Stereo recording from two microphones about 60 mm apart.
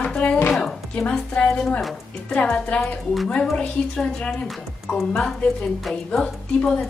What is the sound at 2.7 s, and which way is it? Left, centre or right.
A woman's voice, centre.